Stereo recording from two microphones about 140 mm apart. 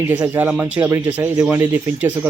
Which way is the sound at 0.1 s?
10° right (ahead or behind).